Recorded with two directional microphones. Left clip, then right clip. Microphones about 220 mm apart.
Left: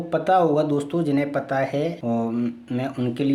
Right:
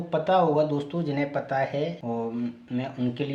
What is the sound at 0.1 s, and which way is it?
Speech, 50° left (ahead or behind).